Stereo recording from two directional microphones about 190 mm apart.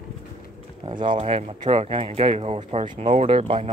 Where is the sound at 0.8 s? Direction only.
25° right (ahead or behind).